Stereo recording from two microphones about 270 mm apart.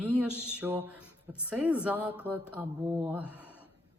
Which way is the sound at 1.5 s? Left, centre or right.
Centre.